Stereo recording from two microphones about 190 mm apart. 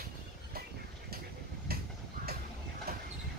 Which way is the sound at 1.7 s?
50° right (ahead or behind).